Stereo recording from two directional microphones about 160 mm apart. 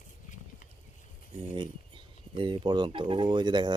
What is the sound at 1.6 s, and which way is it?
Speech, 30° right (ahead or behind).